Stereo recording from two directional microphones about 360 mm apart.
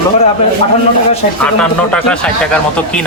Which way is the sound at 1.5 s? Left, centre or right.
Centre.